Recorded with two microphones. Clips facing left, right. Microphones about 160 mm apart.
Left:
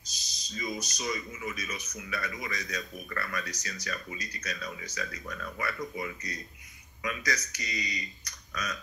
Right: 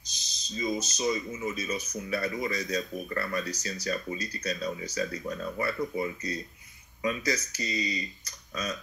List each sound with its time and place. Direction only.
0.5 s speech: 25° right (ahead or behind)